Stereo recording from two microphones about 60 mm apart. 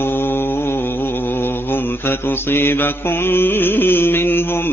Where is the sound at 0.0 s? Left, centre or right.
Left.